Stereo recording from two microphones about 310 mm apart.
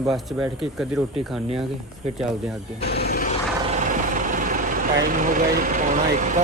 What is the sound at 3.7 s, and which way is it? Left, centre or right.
Vehicle, right.